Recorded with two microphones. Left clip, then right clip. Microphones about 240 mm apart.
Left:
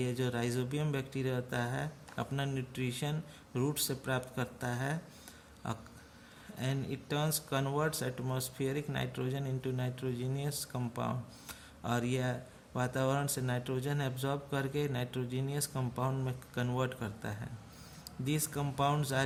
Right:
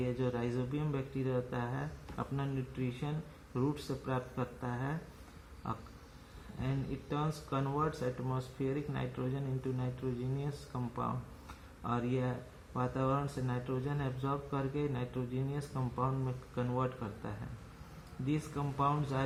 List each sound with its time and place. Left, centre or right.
0.0 s speech: left
6.6 s speech: left